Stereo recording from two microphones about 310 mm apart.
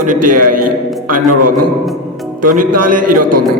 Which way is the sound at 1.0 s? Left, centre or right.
Right.